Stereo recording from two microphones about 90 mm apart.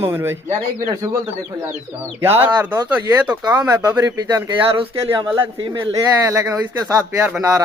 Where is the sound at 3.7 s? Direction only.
35° right (ahead or behind).